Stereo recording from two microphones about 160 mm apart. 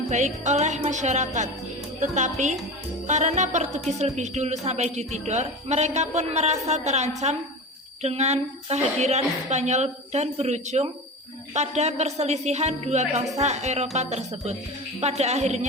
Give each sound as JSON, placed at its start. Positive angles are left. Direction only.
{"t": 0.1, "sound": "speech", "side_deg": -50}